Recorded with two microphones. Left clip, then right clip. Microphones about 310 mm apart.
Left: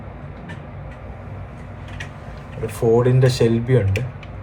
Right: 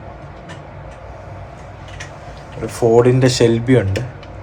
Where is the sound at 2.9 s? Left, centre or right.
Right.